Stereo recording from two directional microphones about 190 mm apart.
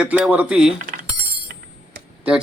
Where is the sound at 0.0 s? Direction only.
5° right (ahead or behind).